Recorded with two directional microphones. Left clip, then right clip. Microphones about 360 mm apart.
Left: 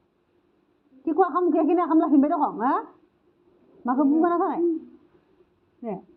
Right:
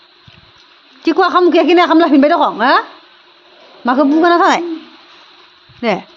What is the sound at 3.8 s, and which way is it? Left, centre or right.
Speech, right.